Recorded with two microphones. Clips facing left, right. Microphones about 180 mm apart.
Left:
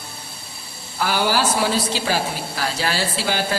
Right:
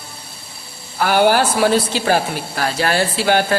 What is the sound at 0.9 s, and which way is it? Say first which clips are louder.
Speech: right 6 dB; 60° right (ahead or behind).